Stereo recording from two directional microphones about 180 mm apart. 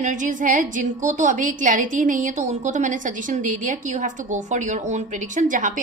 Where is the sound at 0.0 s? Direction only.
45° right (ahead or behind).